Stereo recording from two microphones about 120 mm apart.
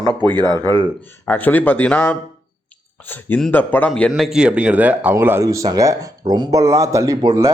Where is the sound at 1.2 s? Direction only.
15° left (ahead or behind).